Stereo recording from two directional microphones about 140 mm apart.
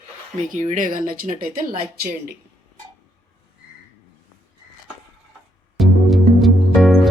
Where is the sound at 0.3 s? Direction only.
60° right (ahead or behind); by 2.3 s 90° right.